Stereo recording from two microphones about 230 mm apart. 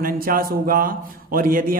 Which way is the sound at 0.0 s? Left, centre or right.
Right.